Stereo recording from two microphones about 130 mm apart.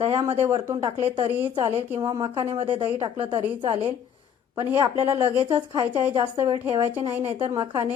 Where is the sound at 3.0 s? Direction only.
40° right (ahead or behind).